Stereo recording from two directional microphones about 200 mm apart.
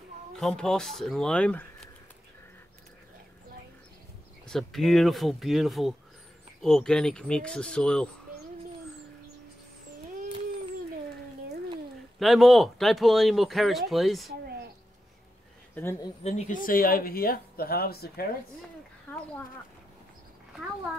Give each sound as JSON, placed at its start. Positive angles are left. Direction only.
{"t": 0.4, "sound": "speech", "side_deg": 5}
{"t": 4.5, "sound": "speech", "side_deg": 0}
{"t": 12.2, "sound": "speech", "side_deg": 0}
{"t": 15.7, "sound": "speech", "side_deg": 10}
{"t": 16.2, "sound": "speech", "side_deg": 35}
{"t": 19.1, "sound": "a sound", "side_deg": 10}